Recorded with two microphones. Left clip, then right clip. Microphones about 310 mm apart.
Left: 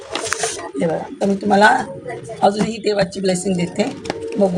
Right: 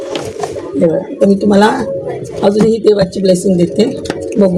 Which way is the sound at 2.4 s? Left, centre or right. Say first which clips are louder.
Right 7 dB; left.